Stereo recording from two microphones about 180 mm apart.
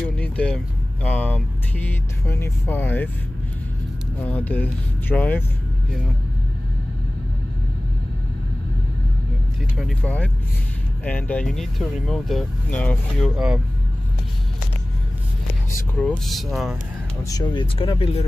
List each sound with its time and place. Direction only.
0.0 s vehicle: 5° left (ahead or behind)
1.0 s speech: 10° left (ahead or behind)
4.2 s speech: 10° left (ahead or behind)
9.8 s speech: 5° left (ahead or behind)
15.9 s speech: 5° left (ahead or behind)
17.2 s speech: 20° left (ahead or behind)